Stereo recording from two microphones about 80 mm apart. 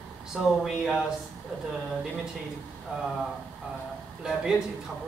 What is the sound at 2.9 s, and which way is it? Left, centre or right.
Speech, centre.